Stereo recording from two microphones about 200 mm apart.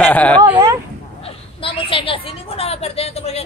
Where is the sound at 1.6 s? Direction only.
25° left (ahead or behind).